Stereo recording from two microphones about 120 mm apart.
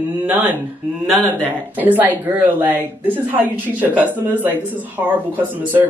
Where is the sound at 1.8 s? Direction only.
15° right (ahead or behind).